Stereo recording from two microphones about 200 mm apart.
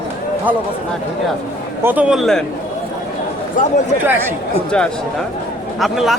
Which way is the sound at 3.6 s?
45° left (ahead or behind).